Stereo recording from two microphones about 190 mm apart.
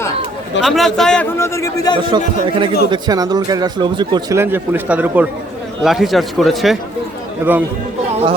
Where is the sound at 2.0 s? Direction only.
25° right (ahead or behind); by 6.7 s centre (ahead or behind).